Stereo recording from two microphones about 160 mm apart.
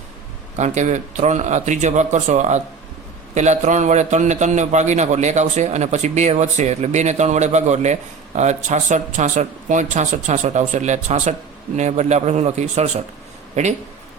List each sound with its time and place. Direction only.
0.5 s a man's voice: 50° right (ahead or behind)